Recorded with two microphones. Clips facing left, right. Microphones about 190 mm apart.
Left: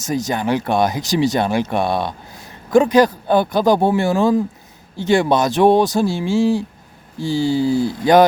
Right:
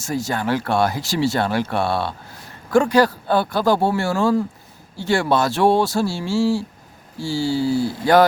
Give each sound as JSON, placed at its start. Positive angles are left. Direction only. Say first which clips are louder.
{"t": 0.0, "sound": "speech", "louder": "left 3 dB", "side_deg": 20}